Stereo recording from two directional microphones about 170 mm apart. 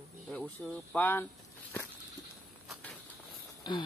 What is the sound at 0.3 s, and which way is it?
Speech, 5° left (ahead or behind).